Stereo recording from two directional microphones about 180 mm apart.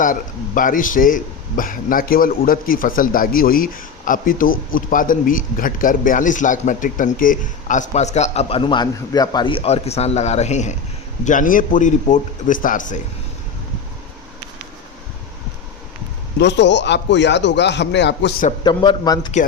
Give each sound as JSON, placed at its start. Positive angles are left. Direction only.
{"t": 0.0, "sound": "a man's voice", "side_deg": 50}
{"t": 16.4, "sound": "speech", "side_deg": 75}
{"t": 18.6, "sound": "a man's voice", "side_deg": 25}